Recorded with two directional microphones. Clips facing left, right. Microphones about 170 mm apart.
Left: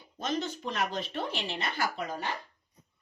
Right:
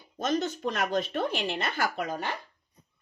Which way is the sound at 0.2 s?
45° right (ahead or behind).